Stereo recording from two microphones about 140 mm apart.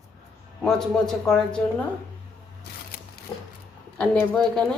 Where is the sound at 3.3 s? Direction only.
35° left (ahead or behind).